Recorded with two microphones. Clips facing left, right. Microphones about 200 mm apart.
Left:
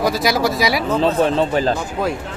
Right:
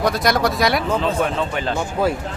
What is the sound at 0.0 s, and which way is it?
Speech, 5° left (ahead or behind).